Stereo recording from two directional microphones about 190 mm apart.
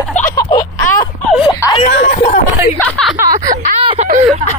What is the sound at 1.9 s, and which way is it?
Speech, 55° left (ahead or behind).